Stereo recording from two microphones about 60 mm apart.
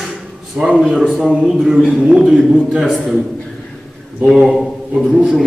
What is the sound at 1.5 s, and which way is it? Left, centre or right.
A man's voice, centre.